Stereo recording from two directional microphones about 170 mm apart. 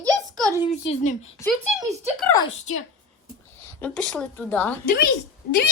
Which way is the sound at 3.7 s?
10° left (ahead or behind).